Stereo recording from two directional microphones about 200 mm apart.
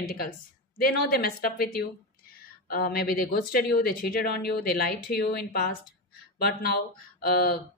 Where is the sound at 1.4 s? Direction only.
50° left (ahead or behind).